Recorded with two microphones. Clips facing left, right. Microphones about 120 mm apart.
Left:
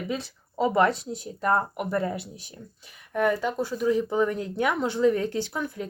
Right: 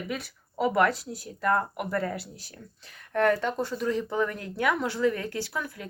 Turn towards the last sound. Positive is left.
turn(degrees=25)  # may be behind; listen again after turning